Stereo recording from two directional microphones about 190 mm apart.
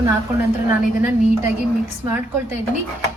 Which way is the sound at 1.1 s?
10° right (ahead or behind).